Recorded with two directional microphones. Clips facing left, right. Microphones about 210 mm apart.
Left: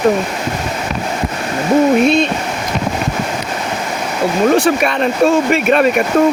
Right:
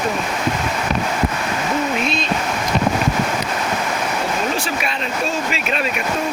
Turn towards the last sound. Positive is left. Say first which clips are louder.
# left 11 dB
turn(degrees=55)  # may be behind; listen again after turning